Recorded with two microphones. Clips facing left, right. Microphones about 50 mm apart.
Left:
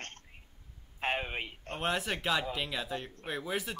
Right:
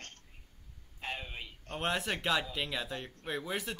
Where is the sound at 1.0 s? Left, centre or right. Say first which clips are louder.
Left 7 dB; left.